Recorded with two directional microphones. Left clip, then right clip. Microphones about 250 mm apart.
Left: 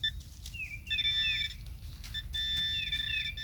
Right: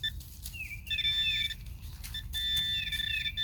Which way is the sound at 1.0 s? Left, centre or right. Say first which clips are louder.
Right 1 dB; centre.